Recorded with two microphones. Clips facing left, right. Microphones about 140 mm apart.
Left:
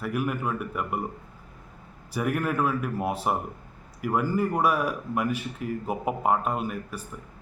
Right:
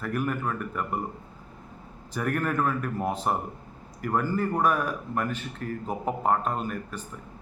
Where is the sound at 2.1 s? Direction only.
10° left (ahead or behind).